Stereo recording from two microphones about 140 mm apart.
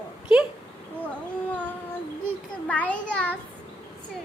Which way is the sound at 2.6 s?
10° left (ahead or behind).